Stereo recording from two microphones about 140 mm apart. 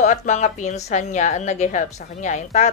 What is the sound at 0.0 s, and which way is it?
A woman's voice, 60° left (ahead or behind).